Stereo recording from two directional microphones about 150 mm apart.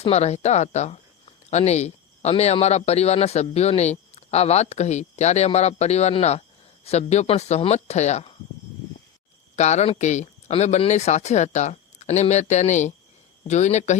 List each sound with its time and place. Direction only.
0.0 s speech: 45° left (ahead or behind)
9.6 s speech: 50° left (ahead or behind)